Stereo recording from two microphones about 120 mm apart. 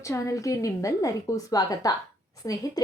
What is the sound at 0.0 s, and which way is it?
A woman's voice, 25° left (ahead or behind).